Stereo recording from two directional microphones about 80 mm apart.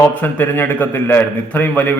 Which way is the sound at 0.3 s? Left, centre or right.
Left.